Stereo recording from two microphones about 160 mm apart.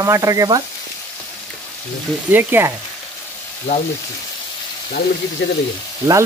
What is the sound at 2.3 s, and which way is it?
Frying, 15° right (ahead or behind).